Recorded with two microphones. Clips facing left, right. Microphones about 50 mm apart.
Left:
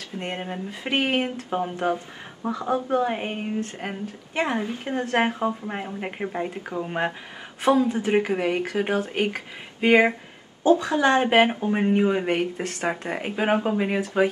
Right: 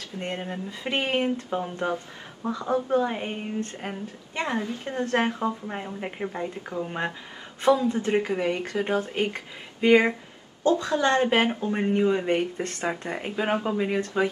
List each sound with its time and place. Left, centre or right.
0.2 s a woman's voice: centre
11.0 s speech: left
11.7 s speech: centre